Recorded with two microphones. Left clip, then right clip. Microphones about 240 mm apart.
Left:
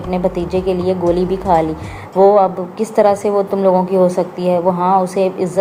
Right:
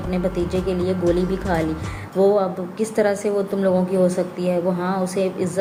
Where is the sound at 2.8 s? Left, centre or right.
Centre.